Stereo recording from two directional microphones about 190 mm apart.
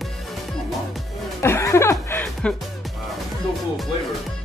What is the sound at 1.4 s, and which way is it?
Speech, 15° left (ahead or behind).